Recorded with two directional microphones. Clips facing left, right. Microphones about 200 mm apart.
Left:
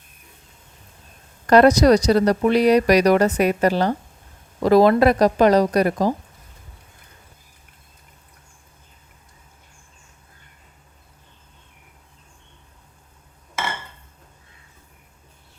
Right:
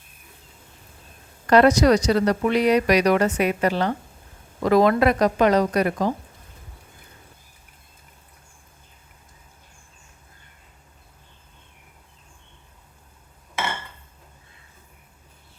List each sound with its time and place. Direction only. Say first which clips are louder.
1.5 s speech: left 3 dB; 40° left (ahead or behind)